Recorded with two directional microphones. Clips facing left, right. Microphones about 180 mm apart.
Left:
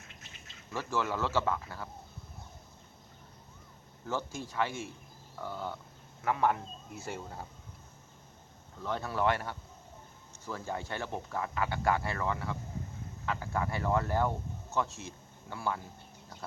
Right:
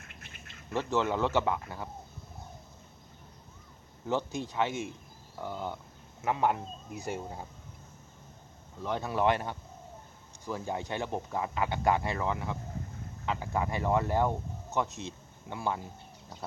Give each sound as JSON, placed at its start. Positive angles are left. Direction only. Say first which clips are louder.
{"t": 0.0, "sound": "duck", "louder": "right 2 dB", "side_deg": -60}
{"t": 0.7, "sound": "speech", "louder": "right 4 dB", "side_deg": -20}
{"t": 4.0, "sound": "speech", "louder": "right 5 dB", "side_deg": -20}
{"t": 8.8, "sound": "speech", "louder": "right 2 dB", "side_deg": -15}